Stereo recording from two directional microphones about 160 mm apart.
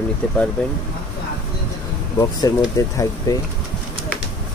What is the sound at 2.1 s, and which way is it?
Speech, 20° left (ahead or behind).